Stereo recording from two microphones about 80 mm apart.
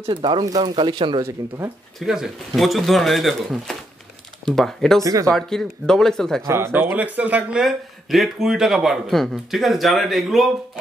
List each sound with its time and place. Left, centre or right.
0.1 s speech: right
2.0 s speech: centre
5.0 s speech: right
5.3 s speech: centre
6.4 s speech: right
6.7 s speech: right
7.6 s speech: centre